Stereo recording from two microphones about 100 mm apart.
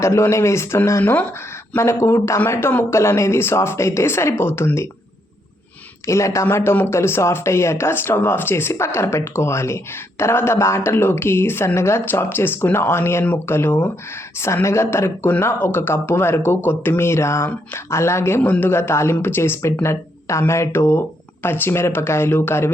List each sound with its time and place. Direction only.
0.0 s speech: 30° left (ahead or behind)
6.1 s speech: 30° left (ahead or behind)